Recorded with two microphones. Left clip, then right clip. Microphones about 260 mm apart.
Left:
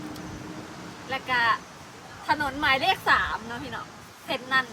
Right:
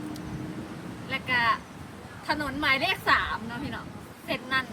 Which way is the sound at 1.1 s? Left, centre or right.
Centre.